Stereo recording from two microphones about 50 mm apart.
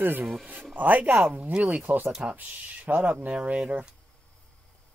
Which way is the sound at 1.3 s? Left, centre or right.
Right.